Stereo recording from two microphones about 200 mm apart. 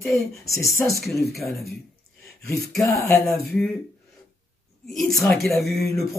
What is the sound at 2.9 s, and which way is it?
Speech, centre (ahead or behind).